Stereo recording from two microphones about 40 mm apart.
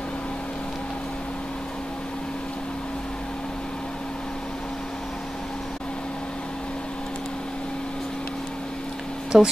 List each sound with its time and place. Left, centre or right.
9.3 s speech: centre